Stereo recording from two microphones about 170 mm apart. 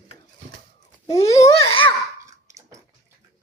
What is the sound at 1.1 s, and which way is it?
Babbling, 20° left (ahead or behind).